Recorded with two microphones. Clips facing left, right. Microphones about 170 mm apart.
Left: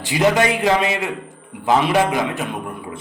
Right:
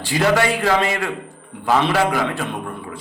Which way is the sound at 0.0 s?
20° left (ahead or behind).